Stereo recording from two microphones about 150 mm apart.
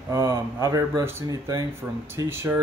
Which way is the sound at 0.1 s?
20° right (ahead or behind).